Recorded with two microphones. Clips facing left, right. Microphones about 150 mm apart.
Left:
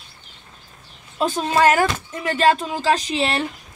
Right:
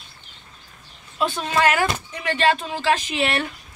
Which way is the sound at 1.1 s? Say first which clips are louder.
Left 3 dB; 35° left (ahead or behind).